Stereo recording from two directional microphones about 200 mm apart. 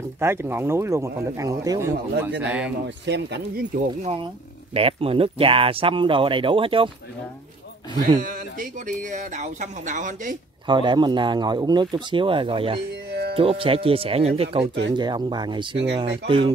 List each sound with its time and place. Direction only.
0.2 s speech: 10° right (ahead or behind)
2.4 s speech: 5° right (ahead or behind)
3.1 s speech: 55° right (ahead or behind)
4.0 s speech: 30° right (ahead or behind)
8.2 s speech: 45° right (ahead or behind)
10.7 s speech: 25° right (ahead or behind)
14.6 s speech: 60° right (ahead or behind)
15.0 s speech: 20° right (ahead or behind)